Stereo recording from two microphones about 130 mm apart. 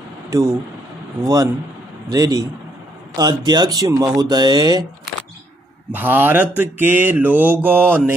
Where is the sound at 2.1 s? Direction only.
30° right (ahead or behind).